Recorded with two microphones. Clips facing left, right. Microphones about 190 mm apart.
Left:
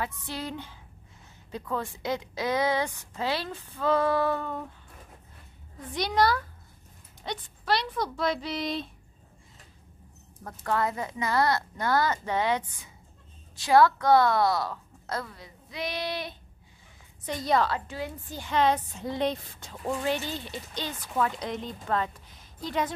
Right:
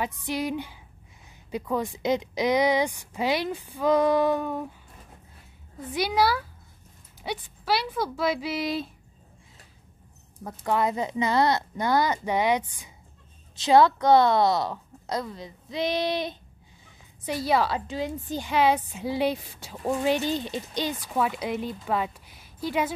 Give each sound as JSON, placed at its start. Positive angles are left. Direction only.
{"t": 0.0, "sound": "a woman's voice", "side_deg": -15}
{"t": 5.9, "sound": "a woman's voice", "side_deg": -5}
{"t": 10.4, "sound": "a woman's voice", "side_deg": -15}
{"t": 17.3, "sound": "a woman's voice", "side_deg": -5}
{"t": 17.7, "sound": "a woman's voice", "side_deg": -20}
{"t": 18.5, "sound": "a woman's voice", "side_deg": -10}